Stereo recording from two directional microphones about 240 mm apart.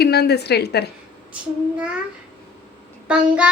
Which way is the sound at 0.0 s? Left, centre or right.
Left.